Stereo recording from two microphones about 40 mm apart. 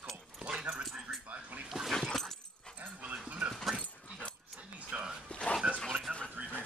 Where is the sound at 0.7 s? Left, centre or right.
Centre.